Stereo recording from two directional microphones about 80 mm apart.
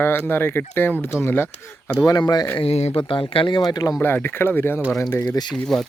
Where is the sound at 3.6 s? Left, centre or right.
Left.